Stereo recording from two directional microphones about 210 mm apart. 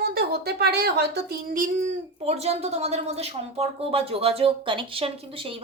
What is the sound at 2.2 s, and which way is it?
A woman's voice, 30° right (ahead or behind).